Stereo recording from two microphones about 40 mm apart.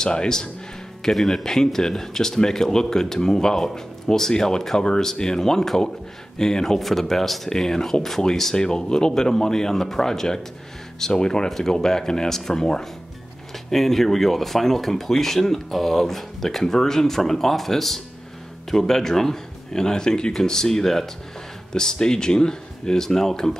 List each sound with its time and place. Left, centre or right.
0.0 s a man's voice: centre
1.0 s speech: centre
8.5 s speech: centre